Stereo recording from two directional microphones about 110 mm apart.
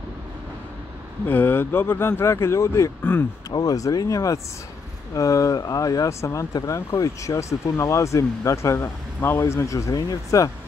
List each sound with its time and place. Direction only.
1.2 s speech: 20° left (ahead or behind)
3.0 s speech: 15° left (ahead or behind)
3.4 s speech: 35° left (ahead or behind)